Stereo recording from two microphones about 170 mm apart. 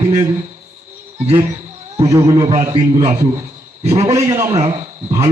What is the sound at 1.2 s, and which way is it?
Speech, 35° right (ahead or behind).